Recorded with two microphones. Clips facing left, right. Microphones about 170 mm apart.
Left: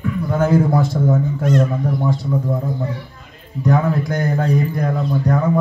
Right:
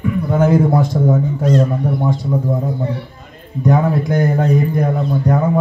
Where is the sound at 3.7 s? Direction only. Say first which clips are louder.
Right 2 dB; 20° right (ahead or behind).